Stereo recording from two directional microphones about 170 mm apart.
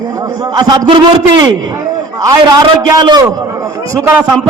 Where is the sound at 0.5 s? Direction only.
25° right (ahead or behind).